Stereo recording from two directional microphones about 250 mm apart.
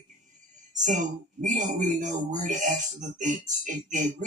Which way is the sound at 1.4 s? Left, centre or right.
Right.